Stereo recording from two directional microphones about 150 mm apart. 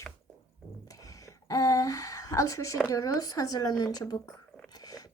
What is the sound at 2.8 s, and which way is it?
A woman's voice, 25° left (ahead or behind).